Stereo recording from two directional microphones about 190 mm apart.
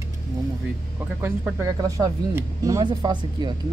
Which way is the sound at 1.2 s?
15° right (ahead or behind).